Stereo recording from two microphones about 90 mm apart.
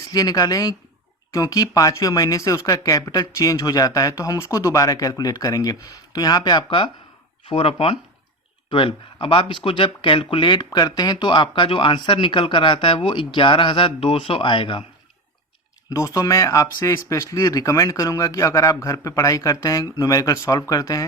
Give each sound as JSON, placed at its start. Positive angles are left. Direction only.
{"t": 0.1, "sound": "speech", "side_deg": 45}
{"t": 7.4, "sound": "speech", "side_deg": 90}
{"t": 15.9, "sound": "speech", "side_deg": 35}